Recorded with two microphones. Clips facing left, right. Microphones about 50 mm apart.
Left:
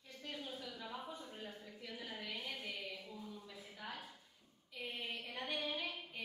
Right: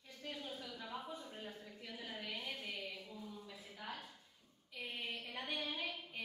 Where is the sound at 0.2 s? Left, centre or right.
Centre.